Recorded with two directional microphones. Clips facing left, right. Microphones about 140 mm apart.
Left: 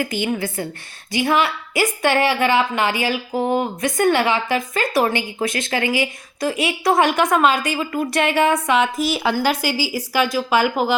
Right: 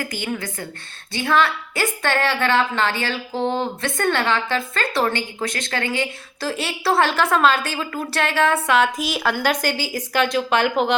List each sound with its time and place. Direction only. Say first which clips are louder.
0.0 s a woman's voice: left 5 dB; 20° left (ahead or behind)